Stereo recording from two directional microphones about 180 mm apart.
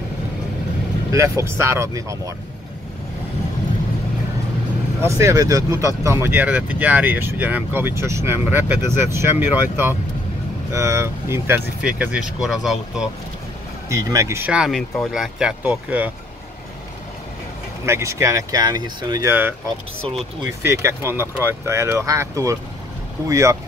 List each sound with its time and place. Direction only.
1.1 s speech: 15° right (ahead or behind)
5.0 s speech: 15° right (ahead or behind)
13.8 s speech: 15° right (ahead or behind)
17.8 s speech: 15° right (ahead or behind)
20.0 s speech: 5° left (ahead or behind)
20.4 s speech: 15° right (ahead or behind)